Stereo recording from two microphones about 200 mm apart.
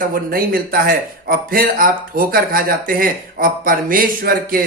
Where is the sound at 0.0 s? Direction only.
45° right (ahead or behind).